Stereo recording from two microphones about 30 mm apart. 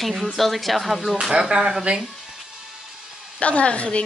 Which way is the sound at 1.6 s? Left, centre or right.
Centre.